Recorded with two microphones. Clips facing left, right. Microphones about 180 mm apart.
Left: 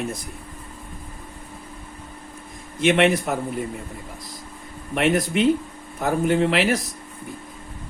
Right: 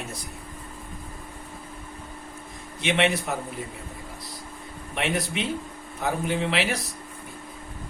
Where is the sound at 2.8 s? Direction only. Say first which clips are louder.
Left 6 dB; 50° left (ahead or behind).